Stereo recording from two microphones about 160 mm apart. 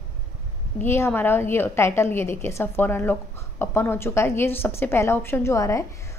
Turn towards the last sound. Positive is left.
turn(degrees=20)  # may be behind; listen again after turning